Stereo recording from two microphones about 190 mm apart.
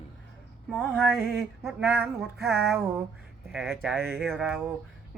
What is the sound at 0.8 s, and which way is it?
Speech, 5° left (ahead or behind).